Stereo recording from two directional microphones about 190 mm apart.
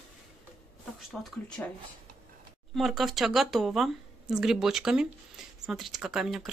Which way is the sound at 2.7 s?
Centre (ahead or behind).